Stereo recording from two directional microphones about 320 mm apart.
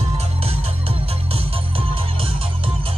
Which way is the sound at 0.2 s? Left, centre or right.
Centre.